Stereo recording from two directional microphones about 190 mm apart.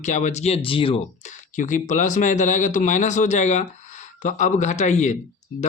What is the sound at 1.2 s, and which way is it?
Speech, 40° left (ahead or behind).